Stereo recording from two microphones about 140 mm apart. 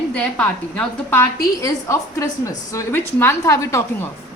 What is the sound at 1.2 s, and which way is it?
A woman's voice, 25° left (ahead or behind).